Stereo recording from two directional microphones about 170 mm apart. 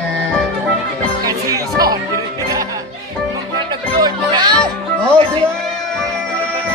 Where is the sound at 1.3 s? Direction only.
20° right (ahead or behind).